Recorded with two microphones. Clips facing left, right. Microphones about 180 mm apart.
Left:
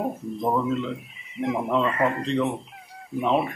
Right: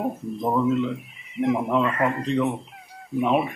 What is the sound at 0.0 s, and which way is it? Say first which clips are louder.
Speech: even; centre (ahead or behind).